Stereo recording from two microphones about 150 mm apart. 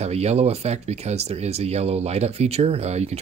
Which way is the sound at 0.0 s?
45° right (ahead or behind).